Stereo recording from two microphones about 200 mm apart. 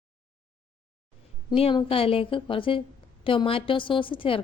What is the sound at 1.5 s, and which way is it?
A woman's voice, 25° left (ahead or behind).